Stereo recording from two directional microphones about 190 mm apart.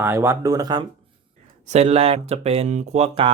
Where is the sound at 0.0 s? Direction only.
15° right (ahead or behind).